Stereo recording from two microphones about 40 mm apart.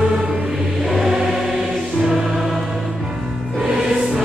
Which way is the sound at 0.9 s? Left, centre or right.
Centre.